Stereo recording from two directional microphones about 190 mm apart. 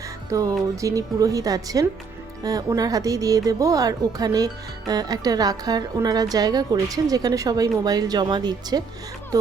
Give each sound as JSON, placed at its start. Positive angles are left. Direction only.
{"t": 0.3, "sound": "a woman's voice", "side_deg": -15}